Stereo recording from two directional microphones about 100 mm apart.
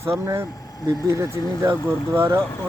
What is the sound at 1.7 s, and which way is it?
Speech, 25° right (ahead or behind).